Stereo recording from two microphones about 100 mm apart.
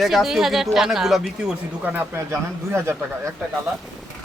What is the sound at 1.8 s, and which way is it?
Speech, 15° right (ahead or behind).